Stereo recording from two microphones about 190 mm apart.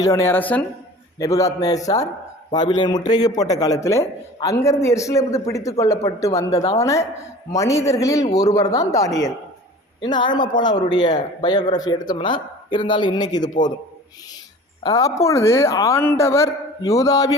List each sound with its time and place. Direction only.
0.0 s a man's voice: 15° left (ahead or behind)
14.8 s a man's voice: 20° left (ahead or behind)